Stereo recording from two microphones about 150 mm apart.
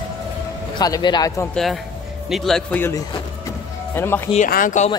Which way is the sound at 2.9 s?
25° left (ahead or behind).